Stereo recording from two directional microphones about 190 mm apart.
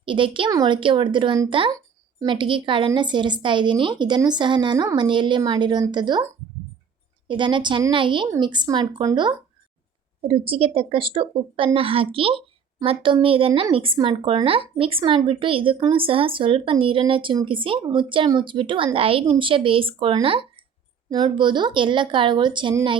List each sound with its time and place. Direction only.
0.0 s speech: 25° right (ahead or behind)
7.3 s speech: 25° right (ahead or behind)